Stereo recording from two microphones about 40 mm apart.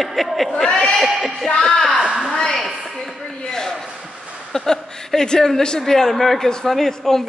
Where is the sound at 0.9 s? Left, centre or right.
Centre.